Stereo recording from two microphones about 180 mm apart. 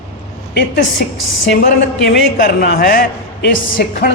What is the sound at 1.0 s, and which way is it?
A woman's voice, 55° left (ahead or behind).